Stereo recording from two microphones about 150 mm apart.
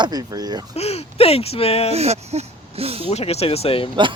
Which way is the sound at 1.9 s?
45° right (ahead or behind).